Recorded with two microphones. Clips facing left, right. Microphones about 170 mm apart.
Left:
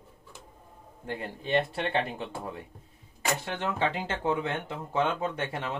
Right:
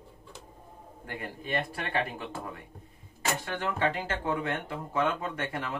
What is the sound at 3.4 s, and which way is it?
Speech, 25° left (ahead or behind).